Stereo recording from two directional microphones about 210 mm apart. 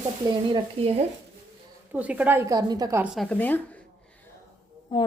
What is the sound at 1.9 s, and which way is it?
Speech, 5° right (ahead or behind).